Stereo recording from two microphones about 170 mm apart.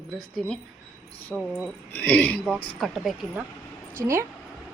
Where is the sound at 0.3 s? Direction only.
5° left (ahead or behind).